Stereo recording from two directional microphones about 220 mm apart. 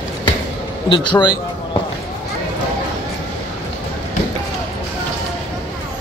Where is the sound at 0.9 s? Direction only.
20° left (ahead or behind).